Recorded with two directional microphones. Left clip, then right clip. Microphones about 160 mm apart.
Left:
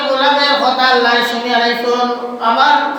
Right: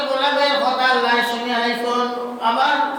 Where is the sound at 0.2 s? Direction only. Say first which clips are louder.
Left 5 dB; 10° right (ahead or behind).